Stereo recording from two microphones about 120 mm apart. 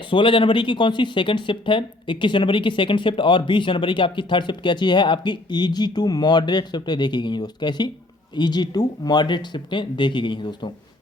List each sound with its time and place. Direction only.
0.1 s speech: 45° left (ahead or behind)